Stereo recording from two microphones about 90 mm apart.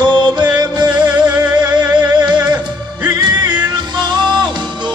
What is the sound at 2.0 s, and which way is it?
Music, 55° right (ahead or behind).